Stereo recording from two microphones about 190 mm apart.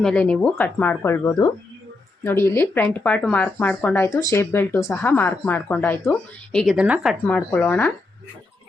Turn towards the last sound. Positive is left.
turn(degrees=10)  # may be behind; listen again after turning